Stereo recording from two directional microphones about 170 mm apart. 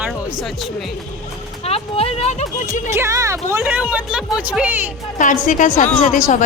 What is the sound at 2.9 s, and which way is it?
Speech, 15° right (ahead or behind).